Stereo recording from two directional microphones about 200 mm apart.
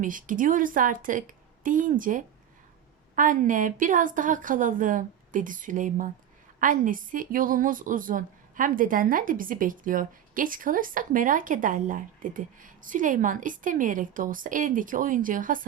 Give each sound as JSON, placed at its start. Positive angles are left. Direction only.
{"t": 0.0, "sound": "a woman's voice", "side_deg": -40}